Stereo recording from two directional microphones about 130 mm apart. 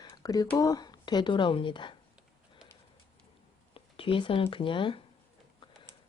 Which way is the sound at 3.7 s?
45° left (ahead or behind).